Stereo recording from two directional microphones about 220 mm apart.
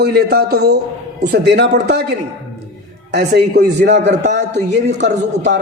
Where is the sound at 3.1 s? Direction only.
50° right (ahead or behind).